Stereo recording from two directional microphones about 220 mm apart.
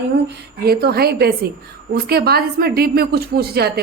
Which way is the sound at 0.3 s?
45° right (ahead or behind).